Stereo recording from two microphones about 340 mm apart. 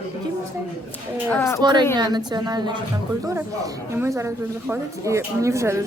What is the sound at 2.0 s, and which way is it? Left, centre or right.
Speech, centre.